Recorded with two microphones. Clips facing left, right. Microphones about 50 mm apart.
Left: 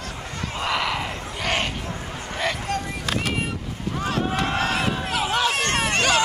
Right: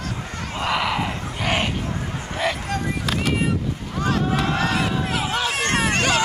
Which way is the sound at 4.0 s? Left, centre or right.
Centre.